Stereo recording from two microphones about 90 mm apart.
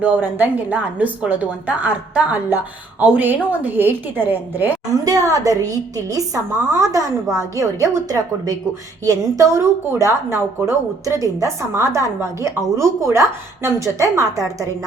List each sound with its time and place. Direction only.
0.0 s a woman's voice: 20° right (ahead or behind)
5.0 s a woman's voice: 40° right (ahead or behind)